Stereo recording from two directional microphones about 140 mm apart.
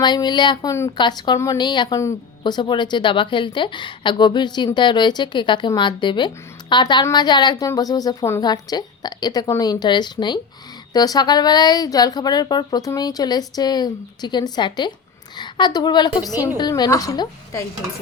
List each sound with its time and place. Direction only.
0.0 s a woman's voice: 30° left (ahead or behind)